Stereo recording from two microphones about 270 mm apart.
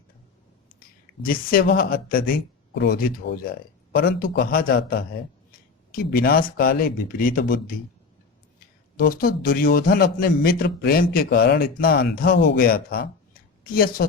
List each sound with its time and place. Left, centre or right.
0.8 s a man's voice: left
9.0 s a man's voice: left